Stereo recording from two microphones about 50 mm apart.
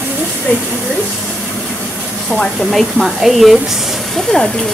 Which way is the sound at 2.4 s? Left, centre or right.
Centre.